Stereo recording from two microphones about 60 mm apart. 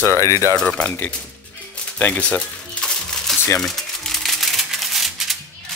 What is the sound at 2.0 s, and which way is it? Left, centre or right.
Speech, left.